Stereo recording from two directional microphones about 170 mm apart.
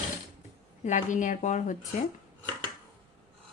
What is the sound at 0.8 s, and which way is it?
Speech, 45° left (ahead or behind).